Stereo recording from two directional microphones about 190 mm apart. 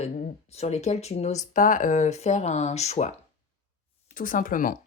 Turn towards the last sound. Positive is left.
turn(degrees=45)  # may be behind; listen again after turning